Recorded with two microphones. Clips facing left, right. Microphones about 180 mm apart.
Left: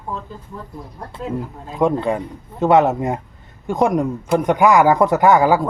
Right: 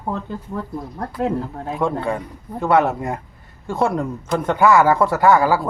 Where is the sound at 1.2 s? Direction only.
70° right (ahead or behind).